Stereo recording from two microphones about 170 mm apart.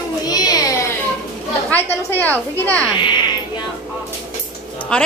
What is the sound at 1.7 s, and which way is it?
Female singing, 10° left (ahead or behind).